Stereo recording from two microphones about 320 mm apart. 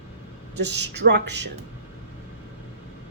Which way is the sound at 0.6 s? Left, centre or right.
Right.